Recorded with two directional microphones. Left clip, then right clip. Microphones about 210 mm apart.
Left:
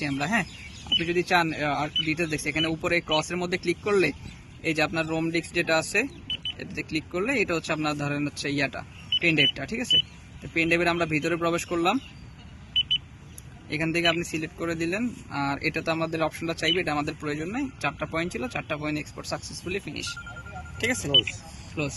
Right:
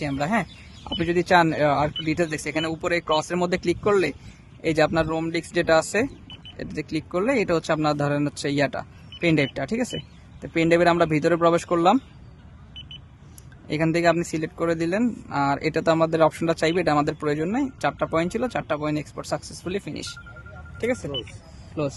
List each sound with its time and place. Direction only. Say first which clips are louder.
0.0 s speech: right 2 dB; 50° right (ahead or behind)
13.7 s speech: right 4 dB; 55° right (ahead or behind)
20.8 s speech: right 2 dB; 45° right (ahead or behind)